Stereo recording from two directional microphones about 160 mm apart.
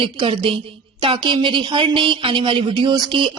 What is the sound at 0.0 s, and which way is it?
A woman's voice, 35° right (ahead or behind).